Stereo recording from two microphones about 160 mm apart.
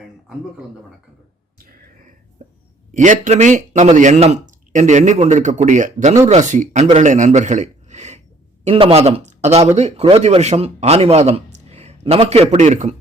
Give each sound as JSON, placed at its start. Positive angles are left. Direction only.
{"t": 2.4, "sound": "hiccup", "side_deg": -50}
{"t": 2.9, "sound": "a man's voice", "side_deg": -50}